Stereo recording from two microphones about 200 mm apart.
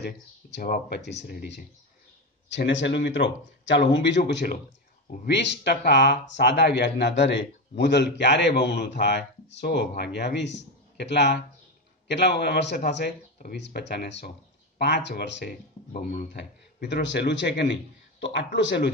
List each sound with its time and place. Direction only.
0.0 s speech: 55° left (ahead or behind)
2.5 s speech: 65° left (ahead or behind)
5.2 s speech: 60° left (ahead or behind)
15.9 s speech: 40° left (ahead or behind)
16.9 s speech: 60° left (ahead or behind)